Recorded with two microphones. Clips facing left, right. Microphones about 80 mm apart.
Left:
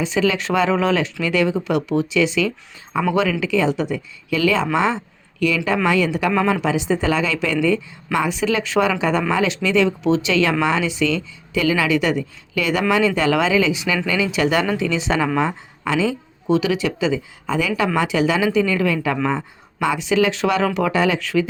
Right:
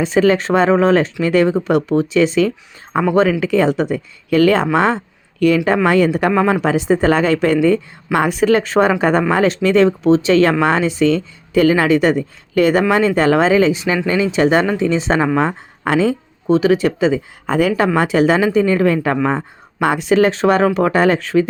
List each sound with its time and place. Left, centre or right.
0.0 s speech: right
2.9 s a woman's voice: right
19.8 s a woman's voice: right